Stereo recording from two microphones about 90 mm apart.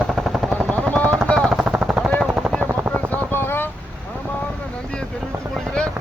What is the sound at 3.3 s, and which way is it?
Vehicle, 25° left (ahead or behind).